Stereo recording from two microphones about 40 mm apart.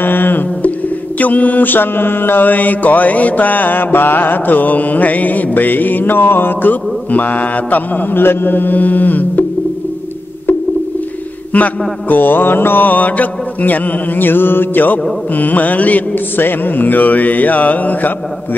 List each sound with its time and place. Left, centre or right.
0.0 s mantra: left
0.6 s mantra: left
2.5 s mantra: left
8.2 s mantra: left
11.5 s mantra: left
12.1 s mantra: left
16.3 s mantra: left